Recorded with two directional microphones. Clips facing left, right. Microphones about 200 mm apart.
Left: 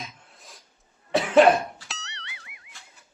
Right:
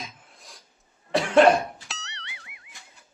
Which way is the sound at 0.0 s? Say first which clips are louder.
Even; centre (ahead or behind).